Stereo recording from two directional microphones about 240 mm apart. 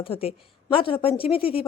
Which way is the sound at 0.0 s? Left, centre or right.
Left.